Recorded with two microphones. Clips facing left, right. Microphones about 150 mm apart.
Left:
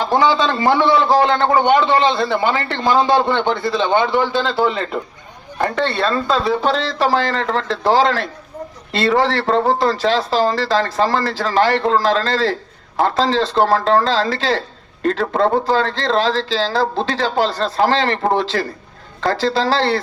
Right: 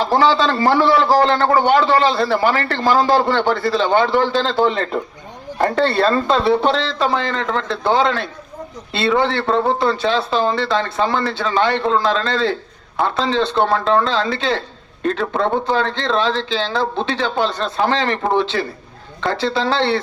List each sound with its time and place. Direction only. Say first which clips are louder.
0.1 s a man's voice: left 1 dB; 15° left (ahead or behind); by 6.1 s centre (ahead or behind)
6.1 s speech: right 2 dB; 25° right (ahead or behind)
6.7 s a man's voice: left 2 dB; 35° left (ahead or behind)